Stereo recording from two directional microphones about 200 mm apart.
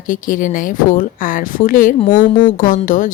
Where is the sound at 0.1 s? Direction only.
40° left (ahead or behind).